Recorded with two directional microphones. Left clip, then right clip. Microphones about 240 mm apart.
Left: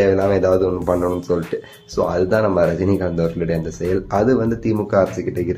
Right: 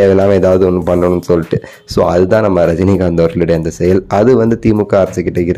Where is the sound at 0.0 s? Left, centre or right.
Right.